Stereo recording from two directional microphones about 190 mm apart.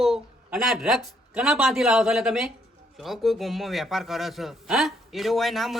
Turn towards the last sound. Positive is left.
turn(degrees=0)  # may be behind; listen again after turning